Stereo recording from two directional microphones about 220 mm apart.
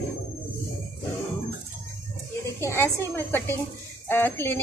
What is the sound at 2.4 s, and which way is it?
Speech, 10° left (ahead or behind).